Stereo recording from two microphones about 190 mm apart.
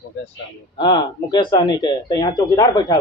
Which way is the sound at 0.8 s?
20° left (ahead or behind).